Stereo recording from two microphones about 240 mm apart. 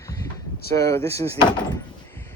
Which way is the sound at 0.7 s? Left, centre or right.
Centre.